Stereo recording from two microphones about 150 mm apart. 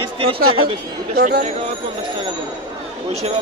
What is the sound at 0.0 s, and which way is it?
Chatter, 40° right (ahead or behind).